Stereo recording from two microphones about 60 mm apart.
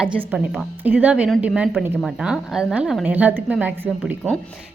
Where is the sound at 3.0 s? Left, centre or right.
Right.